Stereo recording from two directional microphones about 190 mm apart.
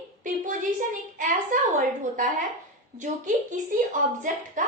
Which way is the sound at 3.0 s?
40° right (ahead or behind).